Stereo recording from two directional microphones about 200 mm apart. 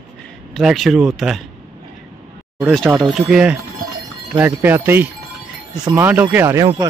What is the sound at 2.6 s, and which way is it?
Speech, centre (ahead or behind).